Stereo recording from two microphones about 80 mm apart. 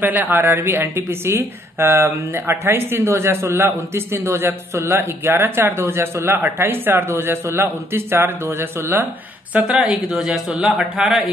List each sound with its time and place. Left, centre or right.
0.0 s a woman's voice: right
9.5 s speech: centre